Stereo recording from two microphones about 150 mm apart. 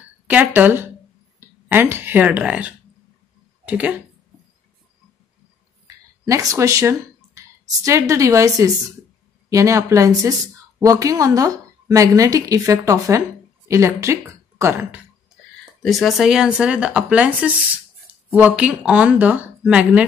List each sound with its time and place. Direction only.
0.3 s speech: 10° right (ahead or behind)
6.2 s a woman's voice: 20° right (ahead or behind)
15.8 s speech: centre (ahead or behind)